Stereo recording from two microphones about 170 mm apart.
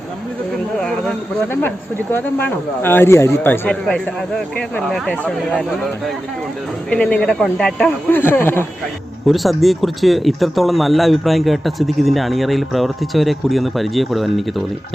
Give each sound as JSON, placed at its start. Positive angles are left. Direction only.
{"t": 0.8, "sound": "speech", "side_deg": 5}
{"t": 6.9, "sound": "speech", "side_deg": 5}
{"t": 9.2, "sound": "speech", "side_deg": 0}